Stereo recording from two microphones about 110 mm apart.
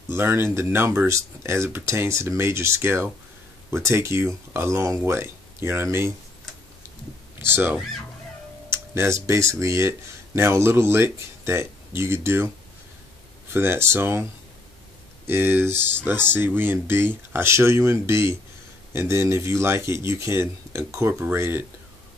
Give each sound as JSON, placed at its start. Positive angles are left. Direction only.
{"t": 0.1, "sound": "speech", "side_deg": -20}
{"t": 7.4, "sound": "speech", "side_deg": -20}
{"t": 13.5, "sound": "speech", "side_deg": -20}
{"t": 15.2, "sound": "speech", "side_deg": -20}